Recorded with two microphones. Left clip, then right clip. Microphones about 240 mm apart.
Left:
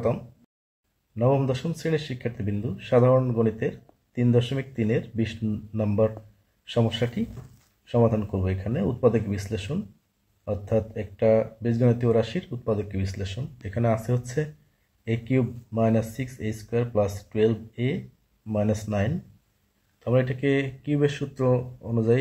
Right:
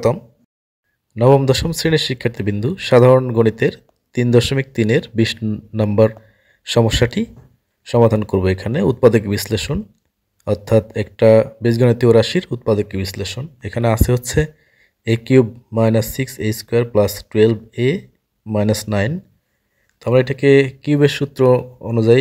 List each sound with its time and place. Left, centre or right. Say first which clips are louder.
1.1 s speech: right 11 dB; right